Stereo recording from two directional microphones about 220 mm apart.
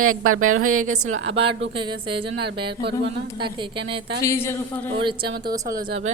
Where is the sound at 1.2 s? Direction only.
25° right (ahead or behind).